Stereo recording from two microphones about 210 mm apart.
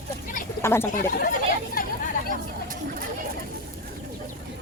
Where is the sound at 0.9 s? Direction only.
45° left (ahead or behind).